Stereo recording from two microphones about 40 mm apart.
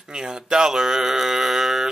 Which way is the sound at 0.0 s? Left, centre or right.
Centre.